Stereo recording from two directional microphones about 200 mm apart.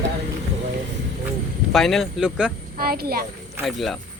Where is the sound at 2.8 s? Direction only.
50° right (ahead or behind).